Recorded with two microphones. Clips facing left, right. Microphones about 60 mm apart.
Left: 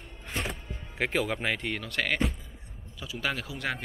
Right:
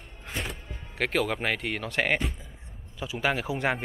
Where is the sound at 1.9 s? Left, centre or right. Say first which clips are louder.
Right 2 dB; right.